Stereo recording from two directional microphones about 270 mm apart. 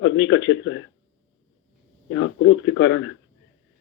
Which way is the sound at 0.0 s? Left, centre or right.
Left.